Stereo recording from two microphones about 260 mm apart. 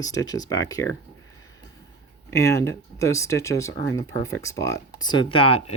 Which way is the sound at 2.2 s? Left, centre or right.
Centre.